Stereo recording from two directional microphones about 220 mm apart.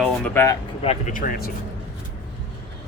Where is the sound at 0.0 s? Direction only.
10° left (ahead or behind).